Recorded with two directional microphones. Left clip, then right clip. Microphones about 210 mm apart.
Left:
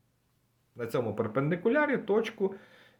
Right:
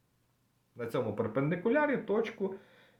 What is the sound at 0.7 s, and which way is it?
Speech, 25° left (ahead or behind).